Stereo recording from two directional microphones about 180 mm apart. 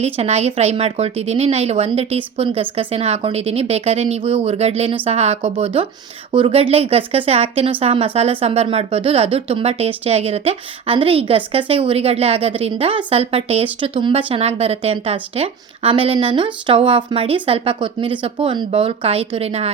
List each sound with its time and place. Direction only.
0.0 s speech: 35° right (ahead or behind)